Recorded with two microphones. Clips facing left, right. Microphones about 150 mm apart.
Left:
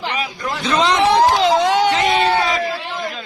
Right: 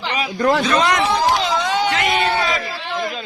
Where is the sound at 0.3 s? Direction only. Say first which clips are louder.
Right 9 dB; 60° right (ahead or behind).